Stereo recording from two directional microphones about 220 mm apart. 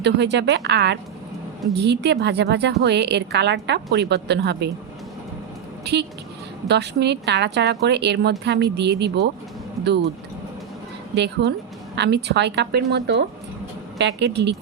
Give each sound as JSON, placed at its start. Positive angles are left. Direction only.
{"t": 0.0, "sound": "a woman's voice", "side_deg": -50}
{"t": 5.8, "sound": "a woman's voice", "side_deg": -50}
{"t": 11.1, "sound": "a woman's voice", "side_deg": -50}